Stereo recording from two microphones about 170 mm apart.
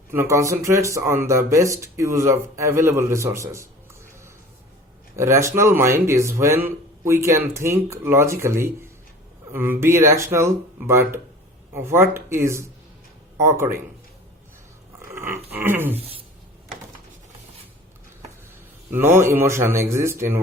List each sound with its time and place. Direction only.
0.1 s speech: 15° right (ahead or behind)
15.1 s a sound: 15° right (ahead or behind)
15.5 s speech: 10° right (ahead or behind)
16.0 s speech: 35° right (ahead or behind)
18.9 s speech: 15° right (ahead or behind)